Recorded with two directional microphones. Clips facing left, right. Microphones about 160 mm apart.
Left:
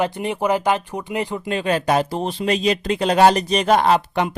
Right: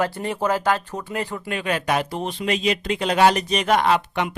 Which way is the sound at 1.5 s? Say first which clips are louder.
Left 4 dB; 30° left (ahead or behind).